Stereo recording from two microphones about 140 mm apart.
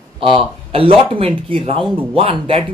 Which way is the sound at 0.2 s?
40° right (ahead or behind).